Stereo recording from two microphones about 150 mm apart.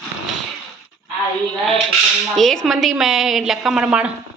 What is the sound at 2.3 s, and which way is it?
A woman's voice, centre (ahead or behind).